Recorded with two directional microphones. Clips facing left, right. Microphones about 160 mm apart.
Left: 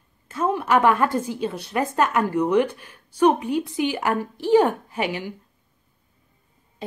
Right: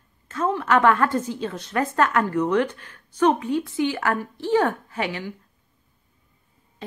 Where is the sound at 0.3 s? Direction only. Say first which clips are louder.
Left 1 dB; 10° left (ahead or behind).